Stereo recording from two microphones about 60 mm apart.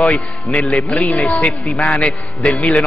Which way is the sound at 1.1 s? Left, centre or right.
Left.